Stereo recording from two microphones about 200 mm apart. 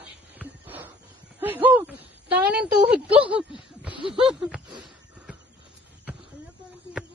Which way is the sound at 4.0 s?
25° right (ahead or behind).